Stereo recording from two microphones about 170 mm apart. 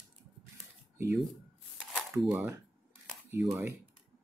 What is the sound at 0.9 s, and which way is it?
Speech, 15° right (ahead or behind).